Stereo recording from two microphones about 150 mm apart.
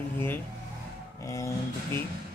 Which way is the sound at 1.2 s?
20° left (ahead or behind).